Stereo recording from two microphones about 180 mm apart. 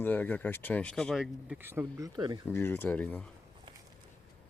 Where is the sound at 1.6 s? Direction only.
10° right (ahead or behind).